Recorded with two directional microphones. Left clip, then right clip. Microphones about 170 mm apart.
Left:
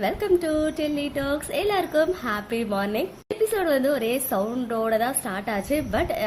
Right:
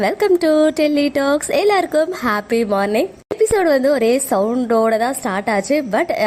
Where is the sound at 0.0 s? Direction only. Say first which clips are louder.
Right 8 dB; 45° right (ahead or behind).